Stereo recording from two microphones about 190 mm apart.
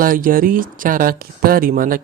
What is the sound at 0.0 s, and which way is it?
Speech, 45° right (ahead or behind).